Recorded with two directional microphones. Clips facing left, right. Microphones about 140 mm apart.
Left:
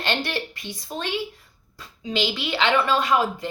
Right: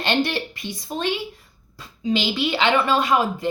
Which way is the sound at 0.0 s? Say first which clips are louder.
Right 4 dB; 20° right (ahead or behind).